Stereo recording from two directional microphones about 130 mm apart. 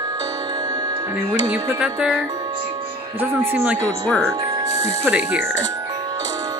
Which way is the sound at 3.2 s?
20° right (ahead or behind).